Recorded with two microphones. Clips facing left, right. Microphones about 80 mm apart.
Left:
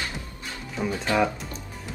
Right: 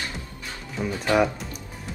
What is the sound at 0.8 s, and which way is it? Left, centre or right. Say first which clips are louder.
Speech: even; centre.